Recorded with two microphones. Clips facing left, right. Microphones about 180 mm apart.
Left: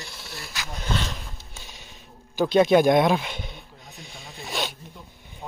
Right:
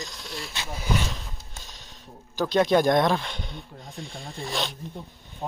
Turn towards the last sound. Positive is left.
turn(degrees=5)  # may be behind; listen again after turning